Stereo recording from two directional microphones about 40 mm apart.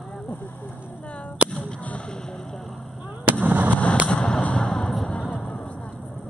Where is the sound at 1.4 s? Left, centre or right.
Right.